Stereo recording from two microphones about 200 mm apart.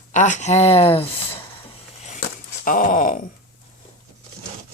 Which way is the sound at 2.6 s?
45° left (ahead or behind).